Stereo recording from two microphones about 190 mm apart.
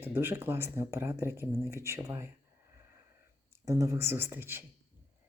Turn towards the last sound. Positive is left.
turn(degrees=-10)  # may be behind; listen again after turning